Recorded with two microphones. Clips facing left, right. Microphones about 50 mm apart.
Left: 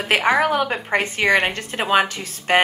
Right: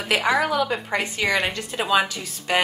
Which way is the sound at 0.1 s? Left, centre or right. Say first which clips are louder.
Left 3 dB; left.